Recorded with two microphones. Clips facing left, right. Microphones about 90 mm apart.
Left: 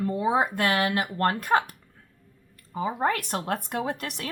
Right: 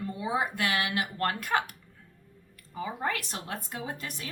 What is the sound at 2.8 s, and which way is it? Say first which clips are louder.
Speech: left 6 dB; 40° left (ahead or behind).